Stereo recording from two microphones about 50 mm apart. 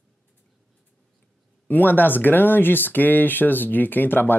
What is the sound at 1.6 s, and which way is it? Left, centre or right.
Speech, left.